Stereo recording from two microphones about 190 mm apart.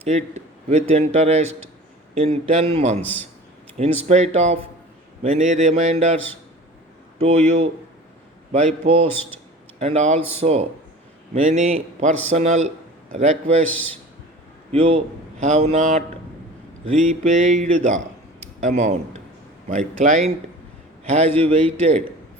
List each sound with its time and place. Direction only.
0.0 s a man's voice: 35° right (ahead or behind)
3.0 s a man's voice: 10° left (ahead or behind)
3.8 s a man's voice: 35° right (ahead or behind)
7.2 s a man's voice: 35° right (ahead or behind)
8.8 s a man's voice: 30° right (ahead or behind)
13.7 s a man's voice: 10° left (ahead or behind)
14.7 s a man's voice: 30° right (ahead or behind)